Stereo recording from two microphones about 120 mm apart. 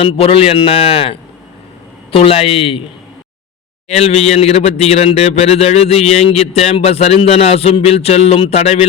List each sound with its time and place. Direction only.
0.0 s a man's voice: 50° left (ahead or behind)
3.8 s a man's voice: 65° left (ahead or behind)